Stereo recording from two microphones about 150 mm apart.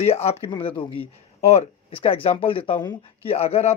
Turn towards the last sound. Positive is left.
turn(degrees=45)  # may be behind; listen again after turning